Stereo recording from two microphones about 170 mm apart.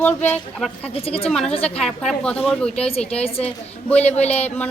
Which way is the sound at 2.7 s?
35° left (ahead or behind).